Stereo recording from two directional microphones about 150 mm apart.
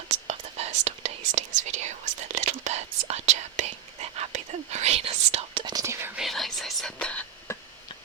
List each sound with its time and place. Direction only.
0.1 s whispering: 45° right (ahead or behind)
5.7 s whispering: 20° right (ahead or behind)
6.1 s whispering: centre (ahead or behind)